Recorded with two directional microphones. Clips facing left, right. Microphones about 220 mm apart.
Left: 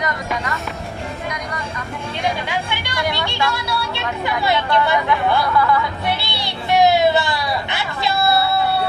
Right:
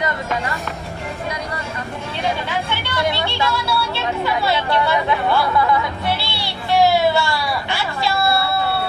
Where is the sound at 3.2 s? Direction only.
15° left (ahead or behind).